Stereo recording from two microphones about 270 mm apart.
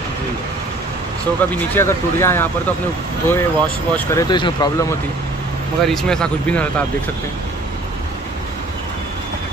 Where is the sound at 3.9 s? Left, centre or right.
Centre.